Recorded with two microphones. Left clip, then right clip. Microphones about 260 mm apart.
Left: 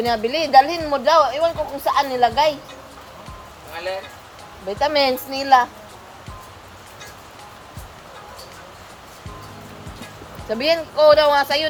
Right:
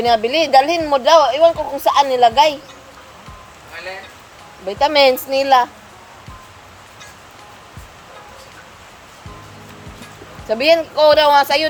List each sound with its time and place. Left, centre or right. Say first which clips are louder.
0.0 s speech: right 6 dB; right
4.7 s speech: right 6 dB; right
10.5 s speech: right 6 dB; right